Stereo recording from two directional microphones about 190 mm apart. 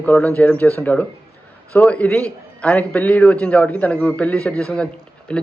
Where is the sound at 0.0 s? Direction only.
10° left (ahead or behind).